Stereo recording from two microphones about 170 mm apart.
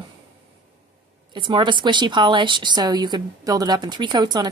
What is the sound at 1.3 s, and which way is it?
A woman's voice, 30° right (ahead or behind).